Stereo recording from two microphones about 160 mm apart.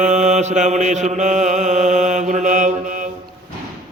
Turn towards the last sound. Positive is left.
turn(degrees=-55)  # may be behind; listen again after turning